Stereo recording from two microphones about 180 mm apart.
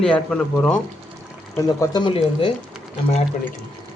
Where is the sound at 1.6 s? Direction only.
20° left (ahead or behind).